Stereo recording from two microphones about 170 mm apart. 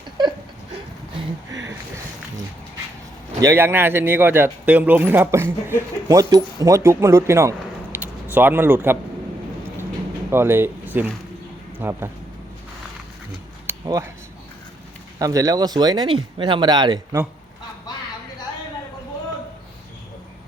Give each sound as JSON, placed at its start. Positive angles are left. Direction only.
{"t": 3.4, "sound": "speech", "side_deg": -15}
{"t": 10.3, "sound": "speech", "side_deg": -15}
{"t": 13.7, "sound": "cutlery", "side_deg": -15}
{"t": 15.2, "sound": "speech", "side_deg": -20}